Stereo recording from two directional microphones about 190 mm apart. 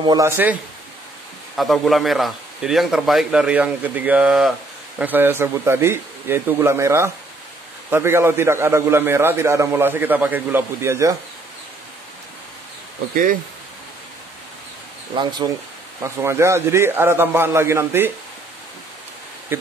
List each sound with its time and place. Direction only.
0.0 s speech: 20° right (ahead or behind)
1.6 s a man's voice: centre (ahead or behind)
13.1 s speech: 45° right (ahead or behind)
15.1 s a man's voice: 20° right (ahead or behind)
19.5 s speech: 10° right (ahead or behind)